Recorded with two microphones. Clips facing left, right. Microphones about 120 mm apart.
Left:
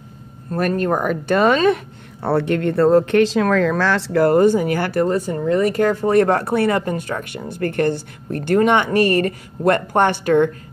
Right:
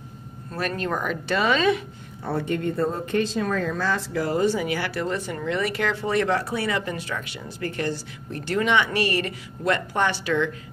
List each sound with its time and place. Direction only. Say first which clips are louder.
0.5 s speech: left 8 dB; 50° left (ahead or behind)
2.2 s speech: left 7 dB; 70° left (ahead or behind); by 10.5 s 50° left (ahead or behind)